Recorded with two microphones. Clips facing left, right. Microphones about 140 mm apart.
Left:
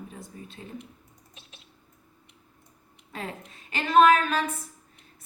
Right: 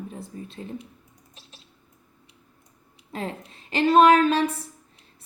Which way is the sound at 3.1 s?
30° right (ahead or behind).